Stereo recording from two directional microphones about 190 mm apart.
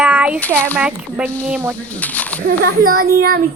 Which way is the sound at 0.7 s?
10° right (ahead or behind).